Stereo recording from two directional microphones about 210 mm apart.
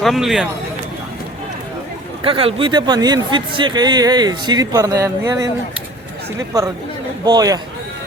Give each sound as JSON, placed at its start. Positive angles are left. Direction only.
{"t": 0.0, "sound": "speech", "side_deg": 0}
{"t": 2.2, "sound": "speech", "side_deg": -25}
{"t": 7.3, "sound": "speech", "side_deg": -20}